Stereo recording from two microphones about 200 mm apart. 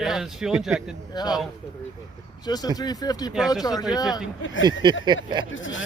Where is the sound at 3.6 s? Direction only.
20° left (ahead or behind).